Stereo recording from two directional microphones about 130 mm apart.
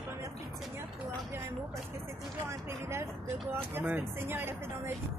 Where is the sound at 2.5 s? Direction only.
20° right (ahead or behind).